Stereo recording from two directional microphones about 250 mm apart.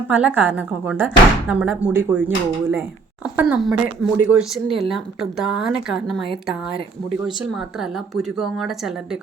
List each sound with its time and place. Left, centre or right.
0.1 s speech: centre